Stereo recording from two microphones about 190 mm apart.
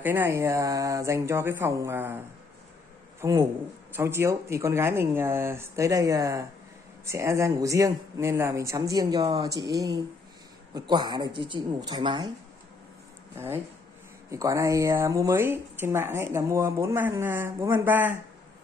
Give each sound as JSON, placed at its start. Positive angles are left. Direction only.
{"t": 0.0, "sound": "a man's voice", "side_deg": -10}
{"t": 14.3, "sound": "speech", "side_deg": -15}